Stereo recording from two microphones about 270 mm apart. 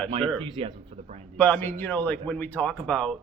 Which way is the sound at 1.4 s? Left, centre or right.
Centre.